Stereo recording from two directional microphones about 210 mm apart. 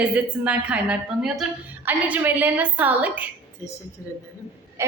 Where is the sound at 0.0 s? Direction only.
5° right (ahead or behind).